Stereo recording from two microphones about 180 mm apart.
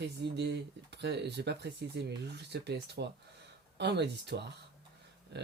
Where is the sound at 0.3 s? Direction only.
70° right (ahead or behind).